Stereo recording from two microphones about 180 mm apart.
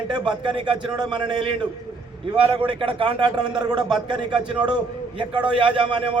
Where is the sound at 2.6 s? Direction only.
30° right (ahead or behind).